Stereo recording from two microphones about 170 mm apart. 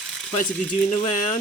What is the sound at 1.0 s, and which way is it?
Speech, 45° left (ahead or behind).